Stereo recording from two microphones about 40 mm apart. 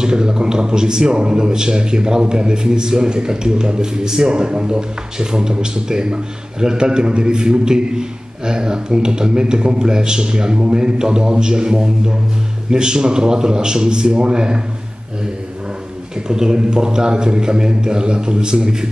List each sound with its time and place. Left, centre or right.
0.0 s a man's voice: centre
16.3 s a man's voice: centre